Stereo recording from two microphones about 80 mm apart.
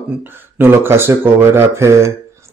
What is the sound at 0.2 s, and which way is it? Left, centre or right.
A man's voice, right.